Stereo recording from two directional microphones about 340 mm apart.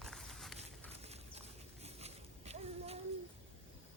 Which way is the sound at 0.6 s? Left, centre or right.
Centre.